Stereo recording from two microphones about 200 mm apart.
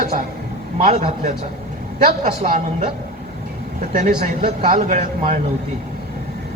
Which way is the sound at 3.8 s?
35° right (ahead or behind).